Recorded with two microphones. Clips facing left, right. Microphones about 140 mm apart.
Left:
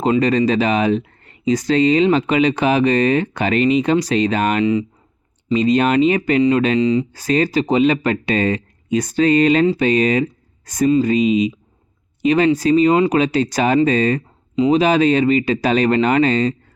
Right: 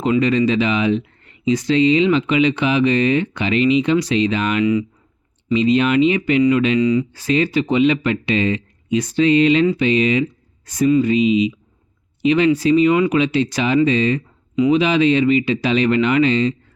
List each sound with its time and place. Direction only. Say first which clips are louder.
0.0 s speech: left 1 dB; 40° left (ahead or behind)
4.6 s speech: even; 30° left (ahead or behind)
5.5 s speech: even; 45° left (ahead or behind)
6.7 s speech: even; 25° left (ahead or behind)
7.1 s speech: left 1 dB; 40° left (ahead or behind)